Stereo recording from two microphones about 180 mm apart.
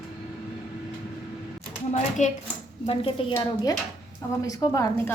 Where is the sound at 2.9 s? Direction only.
30° left (ahead or behind).